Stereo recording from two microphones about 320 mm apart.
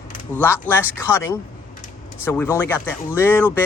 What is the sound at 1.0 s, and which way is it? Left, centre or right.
Speech, centre.